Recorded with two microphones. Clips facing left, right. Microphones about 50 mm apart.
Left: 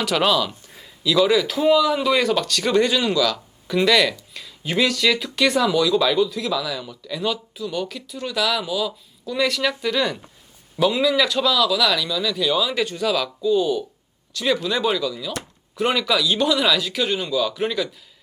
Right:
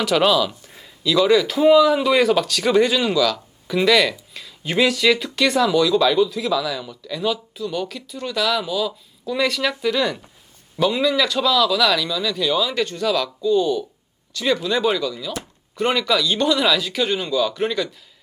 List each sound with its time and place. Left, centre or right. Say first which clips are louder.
0.0 s speech: right 2 dB; centre